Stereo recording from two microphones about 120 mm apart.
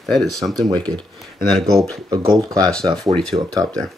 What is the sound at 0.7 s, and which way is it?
Speech, 35° right (ahead or behind).